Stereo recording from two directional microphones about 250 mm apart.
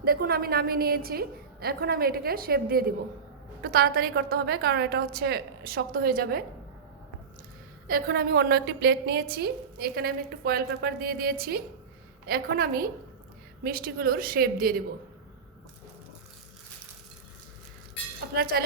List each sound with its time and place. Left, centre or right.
0.0 s a woman's voice: right
7.9 s a woman's voice: right
18.3 s a woman's voice: right